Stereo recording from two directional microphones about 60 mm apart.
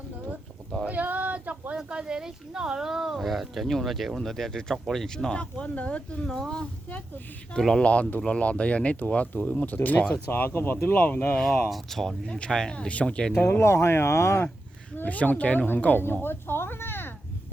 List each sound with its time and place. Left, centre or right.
0.9 s a sound: right
1.7 s speech: centre
7.9 s speech: left
11.7 s speech: centre
13.3 s speech: left
13.6 s speech: left
14.9 s speech: left
16.2 s cat: left